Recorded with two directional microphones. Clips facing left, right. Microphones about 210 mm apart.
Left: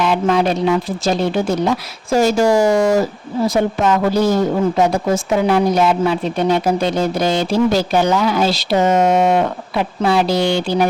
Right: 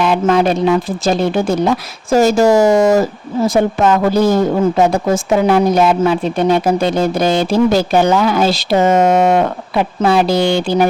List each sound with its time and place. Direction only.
0.0 s speech: 50° right (ahead or behind)
8.9 s speech: 90° right
9.2 s speech: 55° right (ahead or behind)